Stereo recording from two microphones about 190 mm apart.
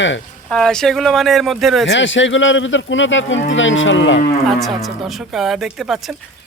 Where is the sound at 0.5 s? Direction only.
5° left (ahead or behind).